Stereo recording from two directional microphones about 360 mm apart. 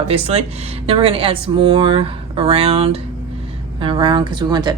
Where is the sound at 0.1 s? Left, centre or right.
Centre.